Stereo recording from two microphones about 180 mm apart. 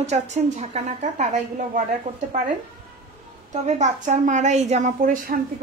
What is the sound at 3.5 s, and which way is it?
A woman's voice, 40° right (ahead or behind).